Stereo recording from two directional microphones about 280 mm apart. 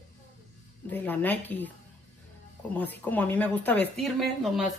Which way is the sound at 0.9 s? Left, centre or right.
Centre.